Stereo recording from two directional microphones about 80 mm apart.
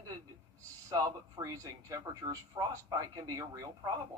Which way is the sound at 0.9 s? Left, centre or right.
Right.